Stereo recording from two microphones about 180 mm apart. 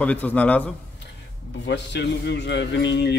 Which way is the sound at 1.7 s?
70° left (ahead or behind).